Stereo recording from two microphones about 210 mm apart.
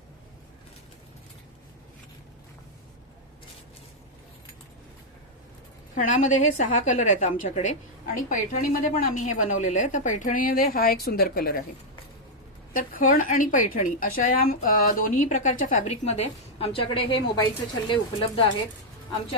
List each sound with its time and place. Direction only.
5.9 s a woman's voice: 40° left (ahead or behind)
12.7 s a woman's voice: 40° left (ahead or behind); by 18.5 s 25° left (ahead or behind)